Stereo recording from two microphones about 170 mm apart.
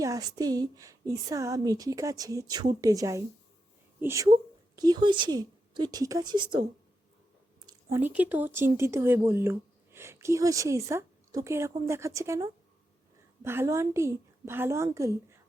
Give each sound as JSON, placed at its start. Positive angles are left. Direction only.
{"t": 0.0, "sound": "a woman's voice", "side_deg": -20}